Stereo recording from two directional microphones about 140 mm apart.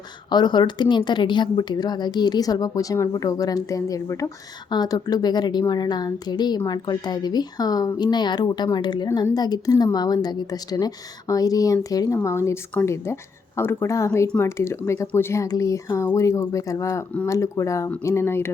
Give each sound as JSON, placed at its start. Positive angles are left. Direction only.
{"t": 0.3, "sound": "a woman's voice", "side_deg": 30}